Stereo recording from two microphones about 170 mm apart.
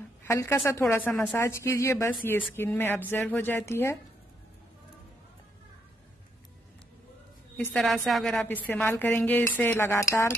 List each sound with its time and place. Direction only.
0.2 s a woman's voice: 15° left (ahead or behind)
7.5 s speech: 5° left (ahead or behind)